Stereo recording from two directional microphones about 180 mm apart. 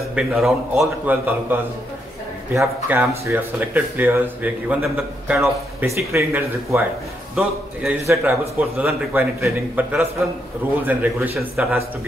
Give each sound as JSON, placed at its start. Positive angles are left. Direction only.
{"t": 0.1, "sound": "speech", "side_deg": -5}
{"t": 5.4, "sound": "speech", "side_deg": -15}
{"t": 7.3, "sound": "a man's voice", "side_deg": 0}
{"t": 8.1, "sound": "a man's voice", "side_deg": -15}